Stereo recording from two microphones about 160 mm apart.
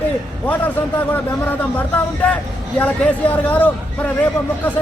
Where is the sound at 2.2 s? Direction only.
10° left (ahead or behind).